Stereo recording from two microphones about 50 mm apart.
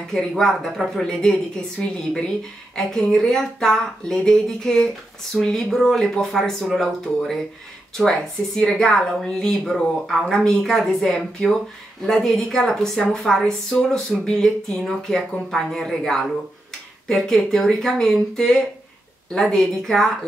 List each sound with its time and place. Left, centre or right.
0.3 s speech: centre